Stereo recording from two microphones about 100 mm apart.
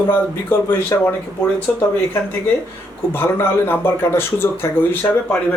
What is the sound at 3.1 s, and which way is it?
Speech, 20° left (ahead or behind).